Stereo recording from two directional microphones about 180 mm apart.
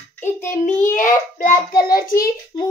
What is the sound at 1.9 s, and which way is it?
Speech, 55° left (ahead or behind).